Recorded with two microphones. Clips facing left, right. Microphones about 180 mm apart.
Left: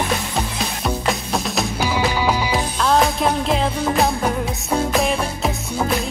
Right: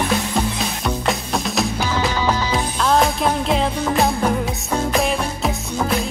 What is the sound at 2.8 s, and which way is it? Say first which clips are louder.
Music: even; centre (ahead or behind).